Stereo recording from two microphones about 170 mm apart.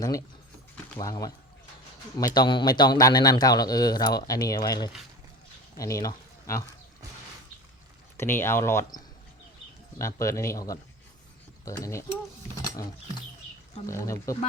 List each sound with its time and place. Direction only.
0.0 s speech: 20° left (ahead or behind)
8.1 s speech: 15° left (ahead or behind)
10.2 s speech: 20° left (ahead or behind)
13.8 s speech: 20° left (ahead or behind)